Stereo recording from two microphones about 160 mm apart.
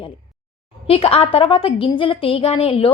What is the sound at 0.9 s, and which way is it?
Speech, 40° left (ahead or behind).